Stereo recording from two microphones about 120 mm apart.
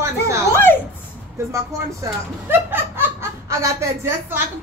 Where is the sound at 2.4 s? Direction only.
20° right (ahead or behind).